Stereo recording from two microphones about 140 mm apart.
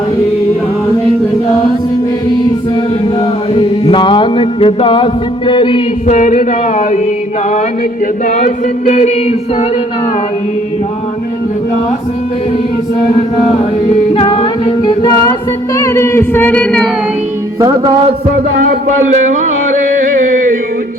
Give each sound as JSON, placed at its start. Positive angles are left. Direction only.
{"t": 3.5, "sound": "mantra", "side_deg": 40}
{"t": 5.5, "sound": "a sound", "side_deg": 35}
{"t": 6.1, "sound": "speech", "side_deg": 60}
{"t": 8.3, "sound": "speech", "side_deg": 60}
{"t": 13.3, "sound": "music", "side_deg": 45}
{"t": 15.7, "sound": "music", "side_deg": 20}
{"t": 18.5, "sound": "speech", "side_deg": -90}